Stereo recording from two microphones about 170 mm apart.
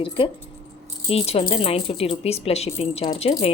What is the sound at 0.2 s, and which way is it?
Speech, 30° left (ahead or behind).